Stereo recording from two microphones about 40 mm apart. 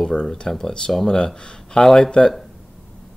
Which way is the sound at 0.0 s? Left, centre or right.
Left.